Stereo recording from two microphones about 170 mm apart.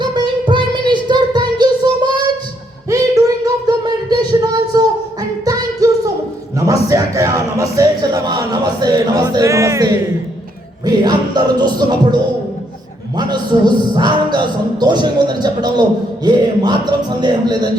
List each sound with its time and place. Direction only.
0.0 s music: 25° right (ahead or behind)
2.9 s a sound: 20° right (ahead or behind)
5.5 s music: 20° right (ahead or behind)
5.8 s a sound: 20° right (ahead or behind)
6.6 s music: 20° right (ahead or behind)
13.1 s a man's voice: 25° right (ahead or behind)